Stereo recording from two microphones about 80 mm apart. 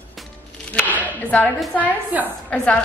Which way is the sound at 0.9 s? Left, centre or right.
Centre.